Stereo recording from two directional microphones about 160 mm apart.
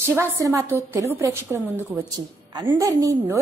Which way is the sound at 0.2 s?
15° right (ahead or behind).